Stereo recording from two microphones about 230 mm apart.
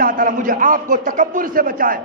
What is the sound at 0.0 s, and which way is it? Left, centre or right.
A man's voice, right.